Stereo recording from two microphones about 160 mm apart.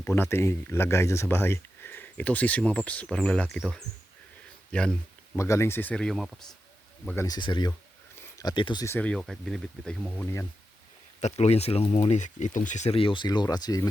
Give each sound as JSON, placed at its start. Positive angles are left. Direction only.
{"t": 0.0, "sound": "speech", "side_deg": 15}
{"t": 5.4, "sound": "speech", "side_deg": 15}
{"t": 7.3, "sound": "speech", "side_deg": 25}
{"t": 8.9, "sound": "speech", "side_deg": 10}
{"t": 11.2, "sound": "speech", "side_deg": 45}